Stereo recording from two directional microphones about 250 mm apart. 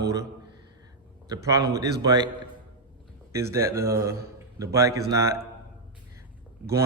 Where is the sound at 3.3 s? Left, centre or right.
Centre.